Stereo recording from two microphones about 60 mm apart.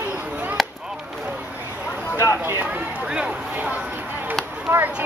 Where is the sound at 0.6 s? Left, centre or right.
Centre.